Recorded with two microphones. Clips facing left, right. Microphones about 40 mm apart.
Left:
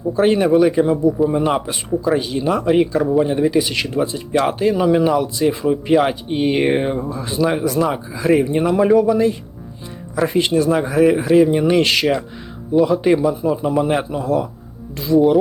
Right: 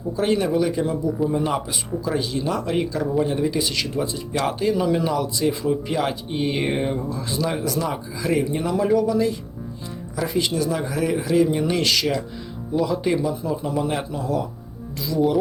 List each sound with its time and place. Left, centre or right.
0.1 s a man's voice: left